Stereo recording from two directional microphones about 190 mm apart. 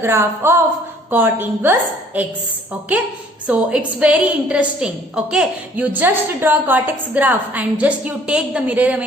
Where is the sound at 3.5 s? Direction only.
5° right (ahead or behind).